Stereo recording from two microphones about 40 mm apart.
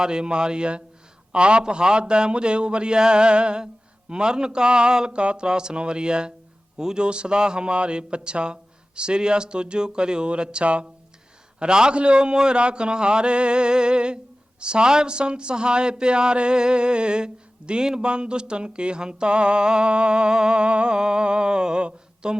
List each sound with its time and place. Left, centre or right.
0.0 s a man's voice: centre